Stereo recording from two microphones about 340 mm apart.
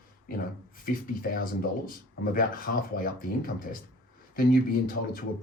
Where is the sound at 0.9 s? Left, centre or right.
Left.